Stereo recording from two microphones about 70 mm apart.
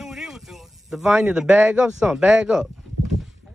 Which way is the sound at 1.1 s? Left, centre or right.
Centre.